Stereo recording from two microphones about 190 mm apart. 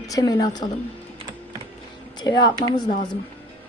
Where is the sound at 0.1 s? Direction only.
20° left (ahead or behind).